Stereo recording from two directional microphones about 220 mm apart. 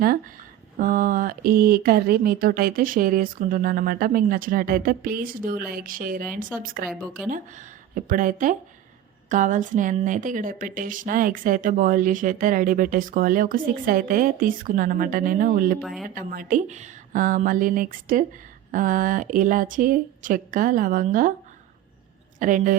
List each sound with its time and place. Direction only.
0.8 s a woman's voice: 40° right (ahead or behind)
15.8 s speech: centre (ahead or behind)
16.0 s a woman's voice: 40° right (ahead or behind)
22.4 s a woman's voice: 35° right (ahead or behind)